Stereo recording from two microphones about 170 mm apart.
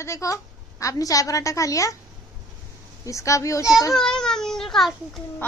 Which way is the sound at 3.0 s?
20° left (ahead or behind).